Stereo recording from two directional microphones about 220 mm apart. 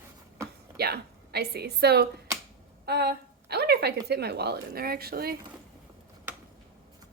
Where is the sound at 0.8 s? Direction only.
45° right (ahead or behind).